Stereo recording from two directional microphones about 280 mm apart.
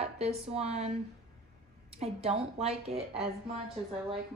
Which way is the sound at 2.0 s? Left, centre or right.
Right.